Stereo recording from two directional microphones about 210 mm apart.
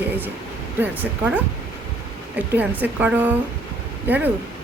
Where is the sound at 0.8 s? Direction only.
5° right (ahead or behind).